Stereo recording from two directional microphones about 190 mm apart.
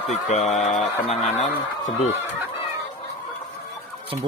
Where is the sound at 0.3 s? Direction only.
35° left (ahead or behind).